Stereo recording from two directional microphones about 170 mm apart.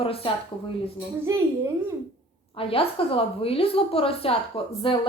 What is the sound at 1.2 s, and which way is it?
Speech, 15° right (ahead or behind).